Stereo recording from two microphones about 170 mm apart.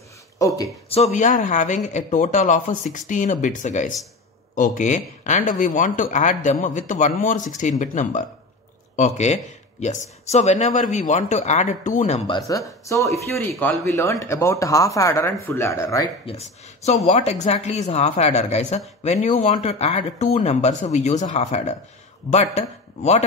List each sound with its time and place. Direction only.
0.9 s speech: 45° left (ahead or behind)
12.3 s speech: 20° left (ahead or behind)
16.3 s speech: 40° left (ahead or behind)